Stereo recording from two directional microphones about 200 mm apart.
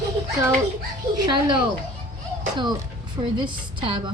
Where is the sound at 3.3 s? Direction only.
25° right (ahead or behind).